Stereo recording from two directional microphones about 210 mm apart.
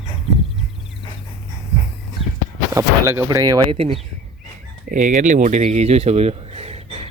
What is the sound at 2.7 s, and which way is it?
Speech, 15° right (ahead or behind).